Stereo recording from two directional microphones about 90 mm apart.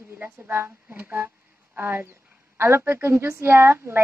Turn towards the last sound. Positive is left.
turn(degrees=-25)  # may be behind; listen again after turning